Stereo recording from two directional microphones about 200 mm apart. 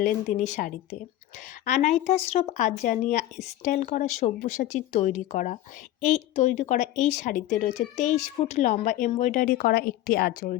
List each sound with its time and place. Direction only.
0.0 s a woman's voice: 35° left (ahead or behind)